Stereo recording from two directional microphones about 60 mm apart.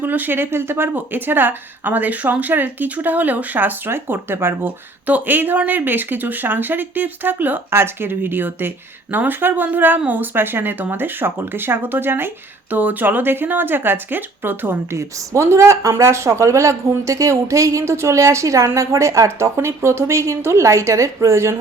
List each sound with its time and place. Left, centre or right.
0.0 s a woman's voice: right
7.7 s a woman's voice: right
14.9 s speech: right